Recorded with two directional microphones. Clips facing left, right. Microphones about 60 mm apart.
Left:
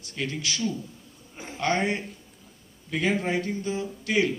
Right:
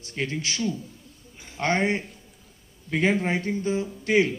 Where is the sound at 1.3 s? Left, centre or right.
Left.